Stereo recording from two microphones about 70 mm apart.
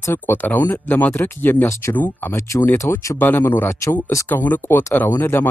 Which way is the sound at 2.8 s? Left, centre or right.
Left.